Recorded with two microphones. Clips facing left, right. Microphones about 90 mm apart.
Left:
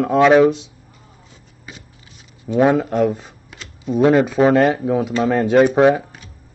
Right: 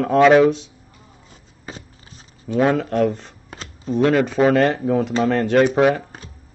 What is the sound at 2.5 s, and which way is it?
Speech, 5° left (ahead or behind).